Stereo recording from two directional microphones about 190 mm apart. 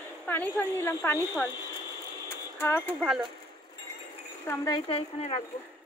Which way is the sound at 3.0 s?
Centre (ahead or behind).